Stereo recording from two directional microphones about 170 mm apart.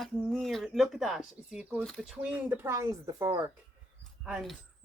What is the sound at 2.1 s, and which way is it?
Speech, 5° right (ahead or behind).